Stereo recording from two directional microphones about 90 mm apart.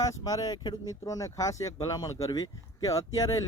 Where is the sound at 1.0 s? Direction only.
35° left (ahead or behind).